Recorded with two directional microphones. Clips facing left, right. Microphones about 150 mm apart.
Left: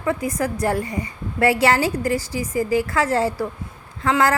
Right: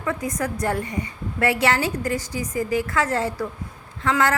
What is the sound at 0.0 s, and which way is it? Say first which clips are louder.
A woman's voice: left 3 dB; 30° left (ahead or behind).